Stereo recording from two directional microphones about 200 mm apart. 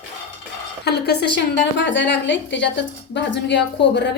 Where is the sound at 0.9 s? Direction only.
55° left (ahead or behind).